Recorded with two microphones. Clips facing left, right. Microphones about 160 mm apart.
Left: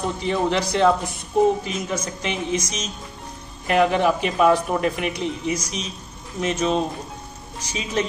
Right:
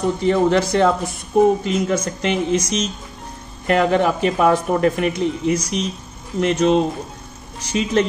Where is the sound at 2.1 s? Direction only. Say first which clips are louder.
Right 6 dB; 55° right (ahead or behind).